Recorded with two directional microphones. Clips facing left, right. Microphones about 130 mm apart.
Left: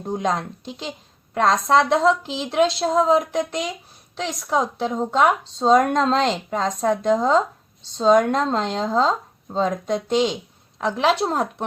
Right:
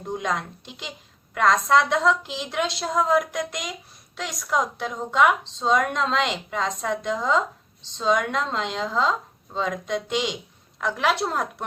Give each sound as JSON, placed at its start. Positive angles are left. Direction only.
{"t": 0.1, "sound": "speech", "side_deg": 35}